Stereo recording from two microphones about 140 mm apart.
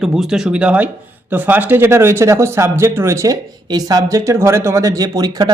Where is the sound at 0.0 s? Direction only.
5° right (ahead or behind).